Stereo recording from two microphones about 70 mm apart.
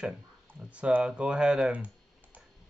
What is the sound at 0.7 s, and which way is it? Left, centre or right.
Speech, centre.